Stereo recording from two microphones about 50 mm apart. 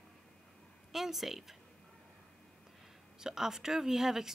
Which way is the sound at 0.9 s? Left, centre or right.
Centre.